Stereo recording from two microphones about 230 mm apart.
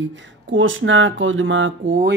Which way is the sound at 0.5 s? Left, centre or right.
Right.